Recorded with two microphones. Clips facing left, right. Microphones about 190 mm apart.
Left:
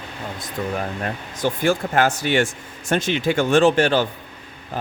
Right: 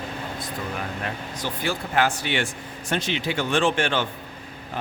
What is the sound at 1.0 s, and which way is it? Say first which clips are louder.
Speech: left 6 dB; 50° left (ahead or behind).